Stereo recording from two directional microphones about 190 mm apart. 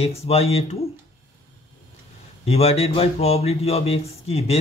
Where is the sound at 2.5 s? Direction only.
35° left (ahead or behind).